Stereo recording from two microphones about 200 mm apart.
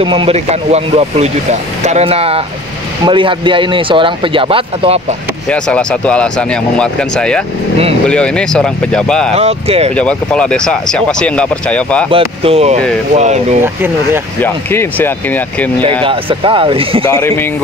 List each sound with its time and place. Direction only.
0.0 s speech: 25° right (ahead or behind)
5.5 s speech: 5° left (ahead or behind)
9.3 s speech: 30° right (ahead or behind)
9.9 s speech: 5° left (ahead or behind)
12.1 s speech: 30° right (ahead or behind)
13.6 s speech: 10° right (ahead or behind)
14.4 s speech: 10° left (ahead or behind)
16.0 s speech: 25° right (ahead or behind)
17.0 s speech: 15° left (ahead or behind)